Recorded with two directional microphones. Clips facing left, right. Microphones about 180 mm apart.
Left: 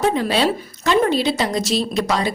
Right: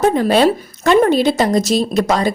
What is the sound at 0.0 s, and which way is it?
A woman's voice, 45° right (ahead or behind).